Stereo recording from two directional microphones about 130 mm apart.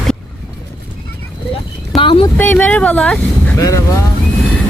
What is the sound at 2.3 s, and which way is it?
Speech, 15° left (ahead or behind).